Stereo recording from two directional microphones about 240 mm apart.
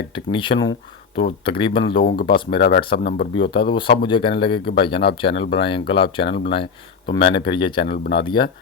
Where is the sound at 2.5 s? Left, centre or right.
Left.